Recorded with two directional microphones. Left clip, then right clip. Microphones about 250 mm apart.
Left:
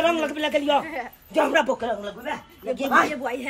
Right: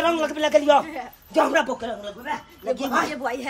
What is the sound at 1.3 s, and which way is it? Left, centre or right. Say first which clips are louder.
Speech: even; centre.